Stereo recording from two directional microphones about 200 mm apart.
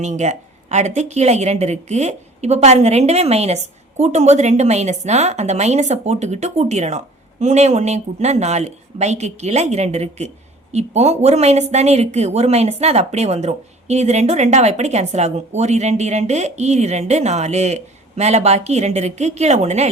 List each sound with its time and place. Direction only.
0.0 s a woman's voice: 35° right (ahead or behind)